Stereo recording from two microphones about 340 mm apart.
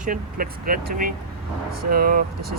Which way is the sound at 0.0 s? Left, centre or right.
Right.